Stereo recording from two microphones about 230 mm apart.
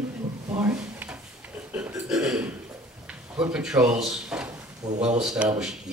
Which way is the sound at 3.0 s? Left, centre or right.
Centre.